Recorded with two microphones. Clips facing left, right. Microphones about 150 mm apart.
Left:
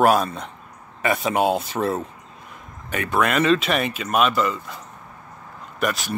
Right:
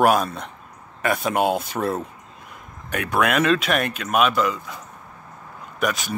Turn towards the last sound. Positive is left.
turn(degrees=0)  # may be behind; listen again after turning